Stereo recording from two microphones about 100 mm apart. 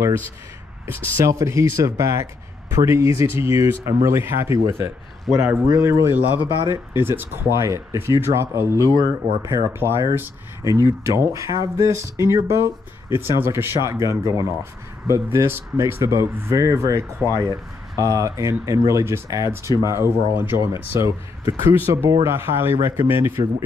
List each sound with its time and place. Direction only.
0.8 s speech: 25° right (ahead or behind)
5.3 s speech: centre (ahead or behind)
5.7 s speech: 30° right (ahead or behind)
10.6 s speech: 35° right (ahead or behind)